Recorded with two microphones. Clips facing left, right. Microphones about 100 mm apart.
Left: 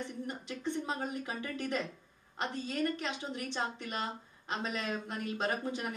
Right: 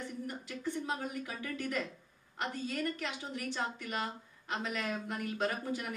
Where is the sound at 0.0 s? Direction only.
20° left (ahead or behind).